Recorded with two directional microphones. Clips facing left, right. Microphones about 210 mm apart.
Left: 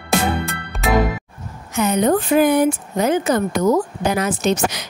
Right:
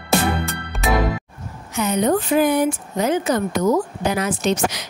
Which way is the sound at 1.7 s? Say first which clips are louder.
Left 2 dB; 50° left (ahead or behind).